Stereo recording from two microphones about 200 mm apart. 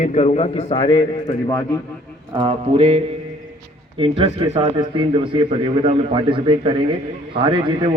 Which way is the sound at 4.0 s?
25° right (ahead or behind).